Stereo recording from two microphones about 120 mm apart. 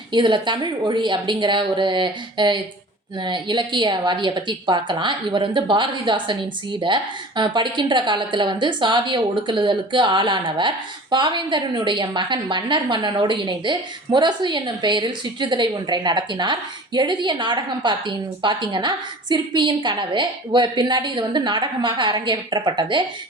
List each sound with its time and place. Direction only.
0.1 s a woman's voice: 40° right (ahead or behind)